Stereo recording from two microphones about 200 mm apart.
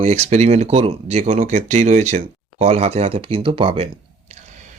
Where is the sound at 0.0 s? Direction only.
35° right (ahead or behind).